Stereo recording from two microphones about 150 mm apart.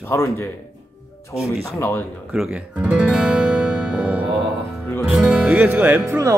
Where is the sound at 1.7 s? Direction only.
15° left (ahead or behind).